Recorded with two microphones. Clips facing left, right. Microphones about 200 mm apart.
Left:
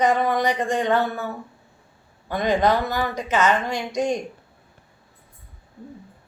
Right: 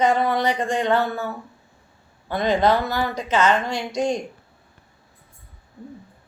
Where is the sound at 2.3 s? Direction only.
15° left (ahead or behind).